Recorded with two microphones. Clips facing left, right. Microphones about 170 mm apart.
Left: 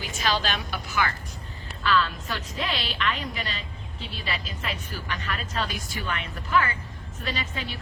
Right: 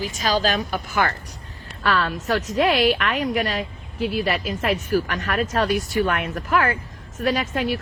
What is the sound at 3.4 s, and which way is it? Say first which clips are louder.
Speech: right 11 dB; 45° right (ahead or behind).